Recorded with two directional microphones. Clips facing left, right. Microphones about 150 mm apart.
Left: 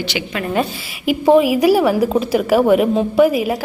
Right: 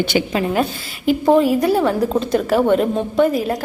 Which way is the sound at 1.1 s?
5° left (ahead or behind).